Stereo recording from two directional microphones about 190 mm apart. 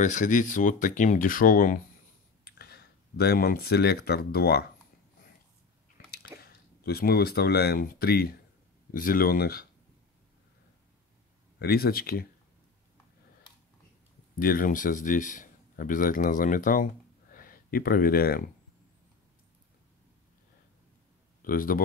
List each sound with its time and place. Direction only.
0.0 s speech: 40° left (ahead or behind)
6.4 s speech: 55° left (ahead or behind)
11.6 s speech: 55° left (ahead or behind)
14.4 s a man's voice: 50° left (ahead or behind)
21.4 s speech: 45° left (ahead or behind)